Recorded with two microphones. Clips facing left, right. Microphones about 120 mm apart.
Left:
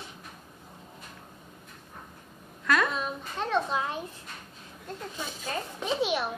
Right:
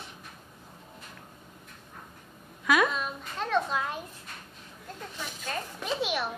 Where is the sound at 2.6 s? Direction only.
5° right (ahead or behind).